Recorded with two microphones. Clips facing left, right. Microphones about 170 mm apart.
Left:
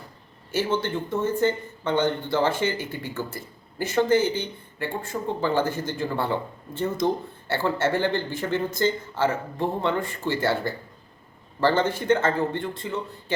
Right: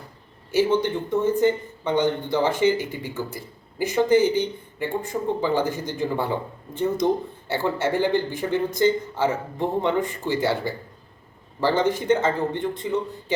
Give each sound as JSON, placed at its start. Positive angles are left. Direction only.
{"t": 0.5, "sound": "speech", "side_deg": -15}